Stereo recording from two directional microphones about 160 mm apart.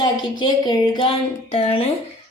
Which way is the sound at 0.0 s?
30° left (ahead or behind).